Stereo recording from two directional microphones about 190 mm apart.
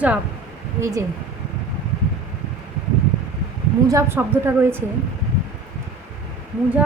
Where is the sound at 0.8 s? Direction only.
15° right (ahead or behind).